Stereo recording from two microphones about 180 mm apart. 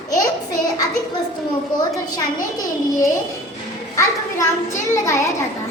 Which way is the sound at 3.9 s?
15° left (ahead or behind).